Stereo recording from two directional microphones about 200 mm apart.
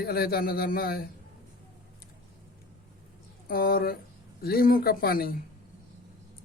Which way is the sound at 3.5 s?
45° left (ahead or behind).